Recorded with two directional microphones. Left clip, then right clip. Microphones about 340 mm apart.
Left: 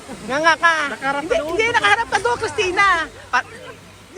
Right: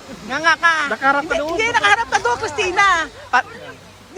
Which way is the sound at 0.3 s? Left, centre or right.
Centre.